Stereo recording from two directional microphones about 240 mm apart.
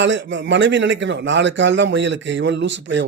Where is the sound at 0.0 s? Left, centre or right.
Right.